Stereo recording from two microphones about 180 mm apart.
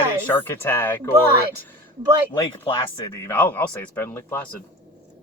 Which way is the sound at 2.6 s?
30° left (ahead or behind).